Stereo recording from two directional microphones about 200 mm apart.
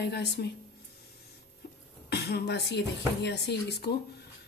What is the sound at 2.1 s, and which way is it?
Speech, 55° left (ahead or behind).